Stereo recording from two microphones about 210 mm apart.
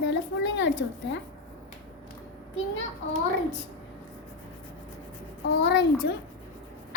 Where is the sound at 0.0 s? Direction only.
60° left (ahead or behind).